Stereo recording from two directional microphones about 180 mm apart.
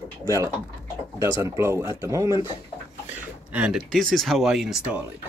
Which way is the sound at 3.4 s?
5° right (ahead or behind).